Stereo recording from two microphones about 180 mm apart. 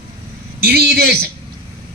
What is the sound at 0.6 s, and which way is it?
Speech, 60° right (ahead or behind).